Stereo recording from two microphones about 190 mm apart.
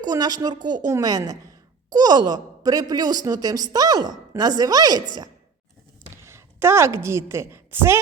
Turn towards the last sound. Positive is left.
turn(degrees=-10)  # may be behind; listen again after turning